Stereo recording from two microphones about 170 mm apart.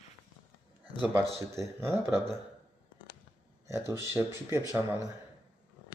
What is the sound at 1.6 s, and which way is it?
Speech, 15° right (ahead or behind).